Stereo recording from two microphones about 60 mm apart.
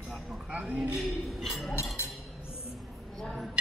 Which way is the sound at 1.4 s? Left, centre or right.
Centre.